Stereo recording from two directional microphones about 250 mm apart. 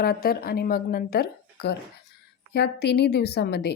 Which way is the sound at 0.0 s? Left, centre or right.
Left.